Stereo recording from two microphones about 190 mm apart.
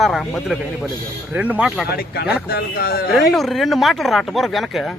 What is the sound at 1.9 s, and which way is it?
Speech, 55° left (ahead or behind).